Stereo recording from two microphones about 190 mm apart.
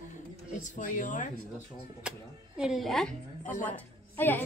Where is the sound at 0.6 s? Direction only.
45° left (ahead or behind).